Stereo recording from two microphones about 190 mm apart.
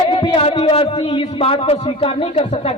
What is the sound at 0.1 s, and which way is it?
A man's voice, 30° left (ahead or behind).